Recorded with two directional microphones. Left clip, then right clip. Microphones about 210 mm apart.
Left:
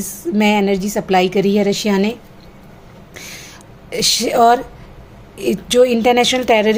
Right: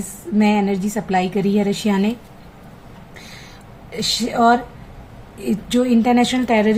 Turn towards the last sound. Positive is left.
turn(degrees=45)  # may be behind; listen again after turning